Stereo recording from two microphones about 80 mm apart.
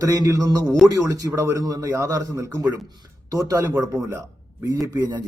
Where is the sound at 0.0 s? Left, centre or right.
Right.